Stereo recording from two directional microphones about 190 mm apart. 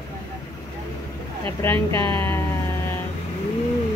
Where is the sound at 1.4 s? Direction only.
10° left (ahead or behind).